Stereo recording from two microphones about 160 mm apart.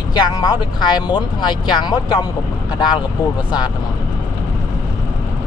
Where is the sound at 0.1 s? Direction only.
25° left (ahead or behind).